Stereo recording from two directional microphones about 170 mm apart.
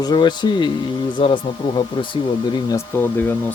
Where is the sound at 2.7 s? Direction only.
10° left (ahead or behind).